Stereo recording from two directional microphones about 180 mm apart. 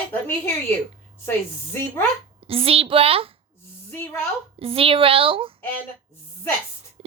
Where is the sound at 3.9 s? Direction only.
10° left (ahead or behind).